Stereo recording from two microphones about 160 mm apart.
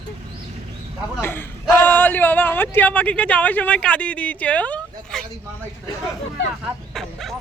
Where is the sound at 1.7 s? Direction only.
10° left (ahead or behind).